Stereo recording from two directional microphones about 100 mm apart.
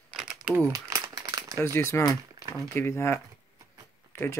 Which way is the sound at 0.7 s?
35° right (ahead or behind).